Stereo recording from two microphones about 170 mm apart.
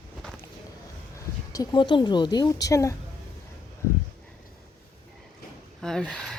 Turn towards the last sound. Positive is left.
turn(degrees=5)  # may be behind; listen again after turning